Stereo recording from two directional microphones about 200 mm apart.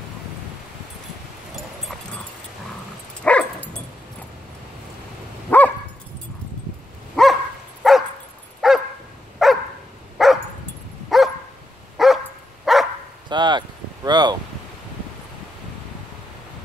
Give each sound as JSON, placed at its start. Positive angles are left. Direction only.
{"t": 3.3, "sound": "dog", "side_deg": 5}
{"t": 5.5, "sound": "dog", "side_deg": 10}
{"t": 7.2, "sound": "dog", "side_deg": 0}
{"t": 13.3, "sound": "speech", "side_deg": -20}